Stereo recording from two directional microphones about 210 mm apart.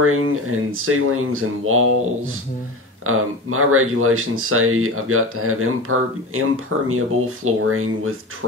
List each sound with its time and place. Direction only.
0.0 s speech: 85° right
3.1 s speech: 85° right